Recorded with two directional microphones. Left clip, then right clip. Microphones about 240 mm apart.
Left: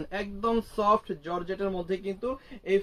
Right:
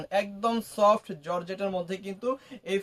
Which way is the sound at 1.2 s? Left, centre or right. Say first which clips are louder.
Right 1 dB; right.